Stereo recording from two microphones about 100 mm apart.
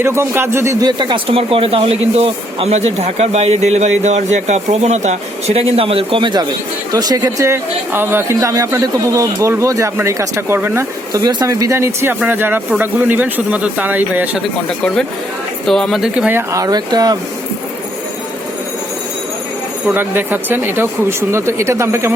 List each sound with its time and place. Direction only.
0.0 s speech: 25° right (ahead or behind)
0.9 s speech: 50° right (ahead or behind)
6.9 s speech: 40° right (ahead or behind); by 10.8 s 25° right (ahead or behind)
11.1 s speech: 40° right (ahead or behind); by 14.4 s 15° right (ahead or behind)
15.6 s speech: 5° left (ahead or behind)
16.3 s speech: 30° right (ahead or behind)
19.9 s speech: 20° right (ahead or behind)